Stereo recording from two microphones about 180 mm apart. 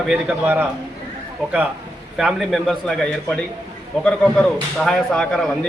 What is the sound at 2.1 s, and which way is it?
Speech, centre (ahead or behind).